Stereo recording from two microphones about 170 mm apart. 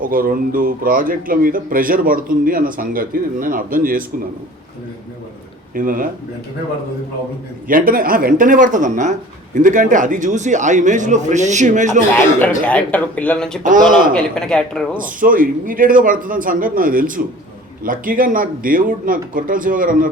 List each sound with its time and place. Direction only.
0.0 s a man's voice: 55° right (ahead or behind)
5.7 s a man's voice: 55° right (ahead or behind)
7.7 s a man's voice: 55° right (ahead or behind)
12.4 s speech: 10° left (ahead or behind)
13.6 s a man's voice: 50° right (ahead or behind)
14.1 s speech: 5° left (ahead or behind)
14.9 s a man's voice: 55° right (ahead or behind)